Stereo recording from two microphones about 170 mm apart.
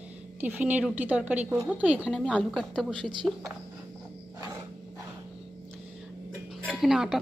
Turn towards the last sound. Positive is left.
turn(degrees=0)  # may be behind; listen again after turning